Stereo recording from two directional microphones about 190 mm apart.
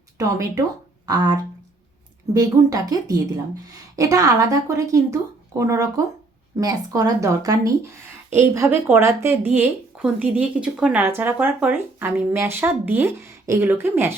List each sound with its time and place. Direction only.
0.2 s a woman's voice: 15° right (ahead or behind)